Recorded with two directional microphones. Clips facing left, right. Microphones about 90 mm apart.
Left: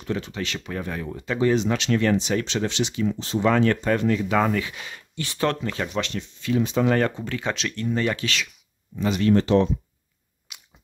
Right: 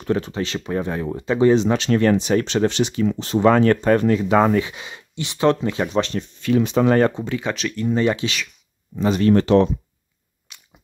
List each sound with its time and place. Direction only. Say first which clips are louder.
0.0 s speech: right 6 dB; 40° right (ahead or behind)
3.5 s speech: right 5 dB; 45° right (ahead or behind); by 5.9 s 20° right (ahead or behind)
5.9 s speech: right 6 dB; 35° right (ahead or behind)
6.4 s speech: right 4 dB; 65° right (ahead or behind)
6.9 s speech: right 5 dB; 30° right (ahead or behind)
7.2 s speech: right 3 dB; 5° right (ahead or behind)
7.8 s speech: right 5 dB; 20° right (ahead or behind)
8.9 s speech: right 4 dB; 40° right (ahead or behind)
9.3 s speech: right 3 dB; 60° right (ahead or behind)
10.5 s biting: even; 5° left (ahead or behind)